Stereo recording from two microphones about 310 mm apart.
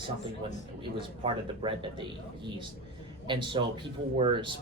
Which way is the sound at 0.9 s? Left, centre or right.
Centre.